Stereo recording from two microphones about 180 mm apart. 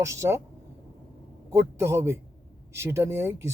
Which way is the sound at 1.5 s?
15° right (ahead or behind).